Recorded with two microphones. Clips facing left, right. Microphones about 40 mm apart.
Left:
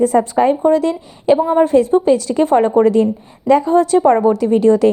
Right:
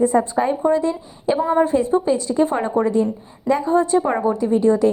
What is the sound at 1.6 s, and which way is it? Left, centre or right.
Speech, left.